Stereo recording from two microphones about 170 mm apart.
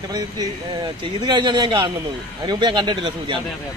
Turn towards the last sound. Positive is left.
turn(degrees=-30)  # may be behind; listen again after turning